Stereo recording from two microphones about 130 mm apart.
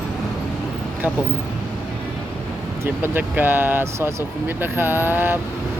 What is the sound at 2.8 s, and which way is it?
Speech, 15° right (ahead or behind).